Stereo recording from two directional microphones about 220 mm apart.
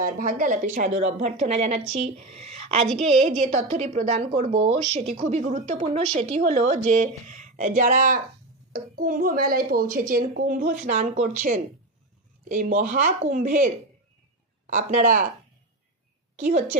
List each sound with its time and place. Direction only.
0.0 s speech: 40° right (ahead or behind)
14.7 s speech: 35° right (ahead or behind)
16.3 s a woman's voice: 30° right (ahead or behind)